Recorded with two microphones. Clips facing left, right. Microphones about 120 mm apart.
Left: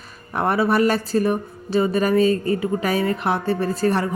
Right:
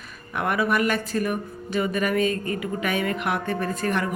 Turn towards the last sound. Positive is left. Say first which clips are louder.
# left 5 dB
turn(degrees=35)  # may be behind; listen again after turning